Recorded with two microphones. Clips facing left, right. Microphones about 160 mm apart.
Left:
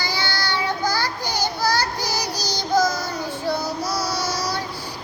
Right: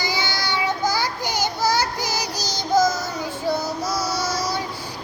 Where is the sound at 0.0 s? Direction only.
20° right (ahead or behind).